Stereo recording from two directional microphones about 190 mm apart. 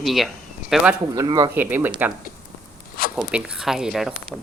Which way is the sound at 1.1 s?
20° right (ahead or behind).